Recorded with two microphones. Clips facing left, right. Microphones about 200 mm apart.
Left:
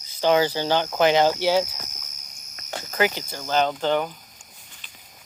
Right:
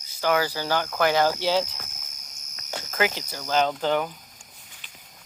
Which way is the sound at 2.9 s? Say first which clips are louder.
Left 3 dB; centre (ahead or behind).